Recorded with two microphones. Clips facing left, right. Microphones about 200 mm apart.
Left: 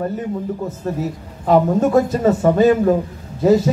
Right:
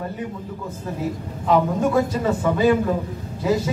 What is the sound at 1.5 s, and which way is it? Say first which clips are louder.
A man's voice: left 5 dB; 45° left (ahead or behind).